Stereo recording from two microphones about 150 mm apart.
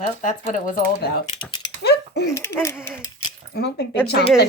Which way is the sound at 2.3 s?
15° left (ahead or behind).